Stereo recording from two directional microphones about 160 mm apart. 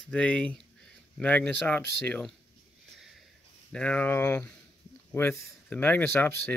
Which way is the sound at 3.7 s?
5° left (ahead or behind).